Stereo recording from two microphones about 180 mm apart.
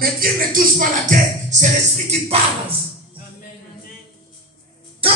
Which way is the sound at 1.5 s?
40° right (ahead or behind).